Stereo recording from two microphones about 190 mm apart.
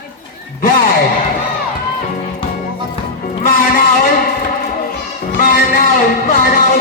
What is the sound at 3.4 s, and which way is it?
Music, 45° left (ahead or behind).